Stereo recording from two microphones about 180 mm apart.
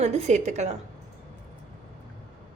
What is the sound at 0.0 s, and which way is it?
Speech, 40° right (ahead or behind).